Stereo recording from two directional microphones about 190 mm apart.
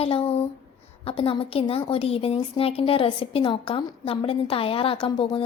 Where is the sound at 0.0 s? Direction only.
30° left (ahead or behind).